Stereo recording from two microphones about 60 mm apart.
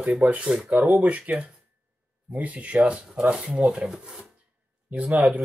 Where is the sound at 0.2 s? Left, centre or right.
Right.